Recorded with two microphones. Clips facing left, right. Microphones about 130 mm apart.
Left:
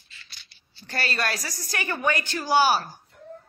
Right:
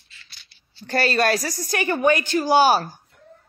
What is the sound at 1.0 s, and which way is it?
Speech, 40° right (ahead or behind).